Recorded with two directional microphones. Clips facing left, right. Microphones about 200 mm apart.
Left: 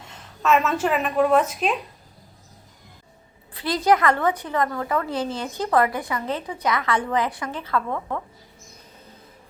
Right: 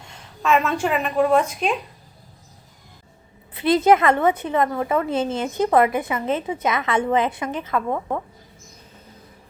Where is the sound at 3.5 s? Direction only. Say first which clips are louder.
Right 4 dB; 20° right (ahead or behind).